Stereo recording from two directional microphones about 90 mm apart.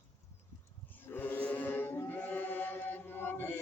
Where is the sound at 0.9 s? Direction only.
20° left (ahead or behind).